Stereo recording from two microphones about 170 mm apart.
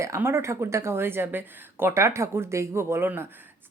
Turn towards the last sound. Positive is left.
turn(degrees=-15)  # may be behind; listen again after turning